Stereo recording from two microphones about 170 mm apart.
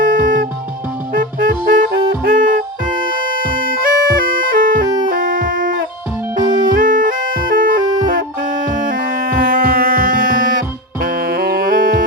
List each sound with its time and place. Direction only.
0.0 s music: 55° right (ahead or behind)
4.3 s bagpipes: 55° right (ahead or behind)
5.0 s music: 55° right (ahead or behind)